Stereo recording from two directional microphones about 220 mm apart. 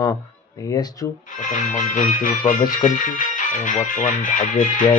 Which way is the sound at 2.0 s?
35° left (ahead or behind).